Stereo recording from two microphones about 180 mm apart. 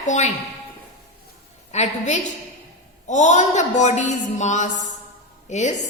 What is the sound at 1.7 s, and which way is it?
A woman's voice, 40° left (ahead or behind).